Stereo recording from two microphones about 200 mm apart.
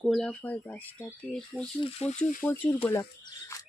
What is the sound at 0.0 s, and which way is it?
Speech, centre (ahead or behind).